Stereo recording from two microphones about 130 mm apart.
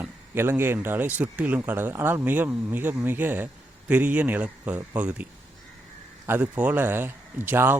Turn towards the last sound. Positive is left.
turn(degrees=-15)  # may be behind; listen again after turning